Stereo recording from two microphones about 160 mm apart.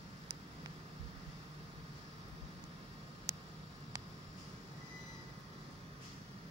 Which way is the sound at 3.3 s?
20° right (ahead or behind).